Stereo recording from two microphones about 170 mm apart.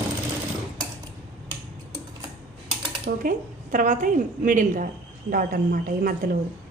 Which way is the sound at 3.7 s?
50° right (ahead or behind).